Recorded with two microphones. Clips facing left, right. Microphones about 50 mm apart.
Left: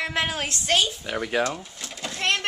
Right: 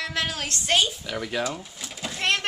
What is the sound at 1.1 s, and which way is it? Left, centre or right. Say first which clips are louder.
Speech: left 4 dB; left.